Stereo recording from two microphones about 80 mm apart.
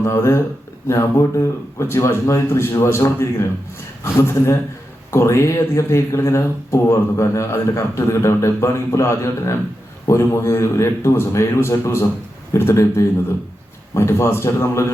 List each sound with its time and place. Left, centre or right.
0.0 s speech: left